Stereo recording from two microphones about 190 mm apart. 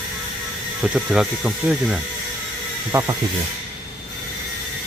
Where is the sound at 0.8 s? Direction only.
Centre (ahead or behind).